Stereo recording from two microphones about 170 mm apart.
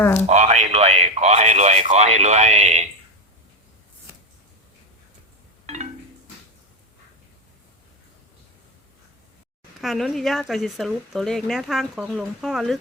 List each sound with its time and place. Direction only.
0.3 s speech: 40° right (ahead or behind)
5.7 s a sound: 40° right (ahead or behind)
9.8 s speech: centre (ahead or behind)